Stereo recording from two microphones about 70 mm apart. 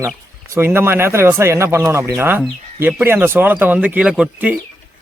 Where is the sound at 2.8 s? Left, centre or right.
Right.